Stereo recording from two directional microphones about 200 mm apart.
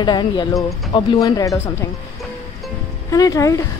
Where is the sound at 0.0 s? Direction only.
20° left (ahead or behind).